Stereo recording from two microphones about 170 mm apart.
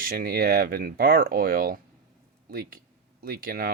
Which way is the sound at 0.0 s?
60° right (ahead or behind).